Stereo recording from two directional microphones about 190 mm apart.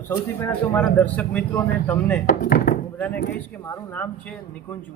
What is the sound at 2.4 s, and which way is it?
Speech, 45° left (ahead or behind).